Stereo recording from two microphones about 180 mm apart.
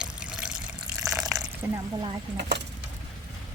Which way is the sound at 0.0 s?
5° right (ahead or behind).